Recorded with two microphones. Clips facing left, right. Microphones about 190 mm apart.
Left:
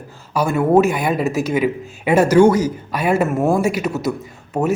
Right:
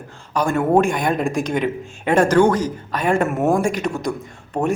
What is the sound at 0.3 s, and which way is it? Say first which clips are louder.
Speech: left 2 dB; 5° left (ahead or behind).